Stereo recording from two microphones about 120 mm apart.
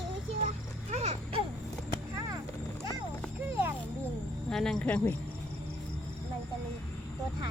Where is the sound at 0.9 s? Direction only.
60° right (ahead or behind).